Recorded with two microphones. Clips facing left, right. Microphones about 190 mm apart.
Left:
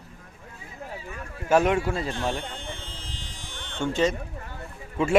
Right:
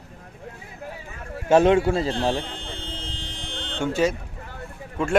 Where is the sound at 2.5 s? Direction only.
65° right (ahead or behind).